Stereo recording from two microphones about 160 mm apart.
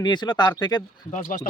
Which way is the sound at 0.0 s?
25° left (ahead or behind).